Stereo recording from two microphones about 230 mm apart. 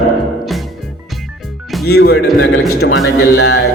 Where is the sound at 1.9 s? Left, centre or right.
Left.